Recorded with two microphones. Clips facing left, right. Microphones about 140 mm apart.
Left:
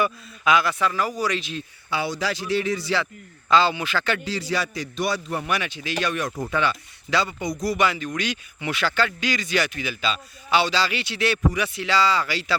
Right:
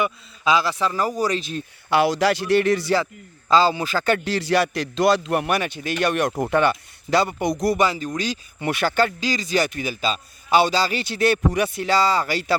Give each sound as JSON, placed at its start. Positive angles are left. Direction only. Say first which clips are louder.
{"t": 0.0, "sound": "a man's voice", "louder": "even", "side_deg": -30}
{"t": 1.9, "sound": "a man's voice", "louder": "right 8 dB", "side_deg": -80}
{"t": 3.5, "sound": "speech", "louder": "right 2 dB", "side_deg": -35}
{"t": 4.3, "sound": "a man's voice", "louder": "right 6 dB", "side_deg": -70}
{"t": 5.5, "sound": "a man's voice", "louder": "right 4 dB", "side_deg": -50}
{"t": 6.0, "sound": "a man's voice", "louder": "right 5 dB", "side_deg": -65}
{"t": 7.4, "sound": "a man's voice", "louder": "right 5 dB", "side_deg": -70}
{"t": 7.8, "sound": "speech", "louder": "right 2 dB", "side_deg": -35}
{"t": 8.7, "sound": "a man's voice", "louder": "right 4 dB", "side_deg": -50}